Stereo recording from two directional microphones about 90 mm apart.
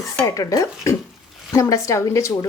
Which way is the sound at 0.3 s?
40° left (ahead or behind).